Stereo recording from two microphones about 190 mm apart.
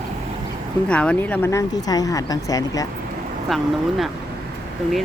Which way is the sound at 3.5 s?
Centre (ahead or behind).